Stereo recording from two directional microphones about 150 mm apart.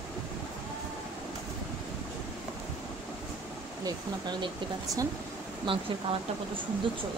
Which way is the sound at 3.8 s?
30° right (ahead or behind).